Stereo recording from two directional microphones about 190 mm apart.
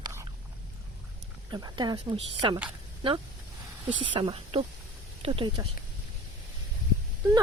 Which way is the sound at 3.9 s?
25° right (ahead or behind).